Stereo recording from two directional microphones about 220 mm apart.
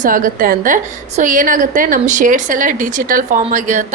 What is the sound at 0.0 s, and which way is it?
A woman's voice, 40° right (ahead or behind).